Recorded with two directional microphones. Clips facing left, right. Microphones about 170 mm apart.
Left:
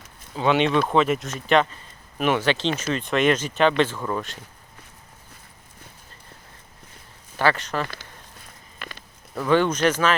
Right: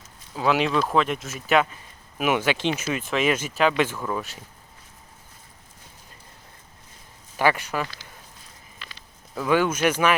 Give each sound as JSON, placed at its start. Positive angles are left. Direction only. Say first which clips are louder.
{"t": 0.3, "sound": "speech", "louder": "left 2 dB", "side_deg": -5}
{"t": 7.3, "sound": "speech", "louder": "even", "side_deg": -10}
{"t": 8.8, "sound": "a sound", "louder": "left 7 dB", "side_deg": 55}
{"t": 9.3, "sound": "speech", "louder": "left 2 dB", "side_deg": -5}